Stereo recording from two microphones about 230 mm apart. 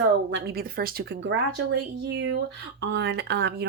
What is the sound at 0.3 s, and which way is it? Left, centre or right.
Speech, right.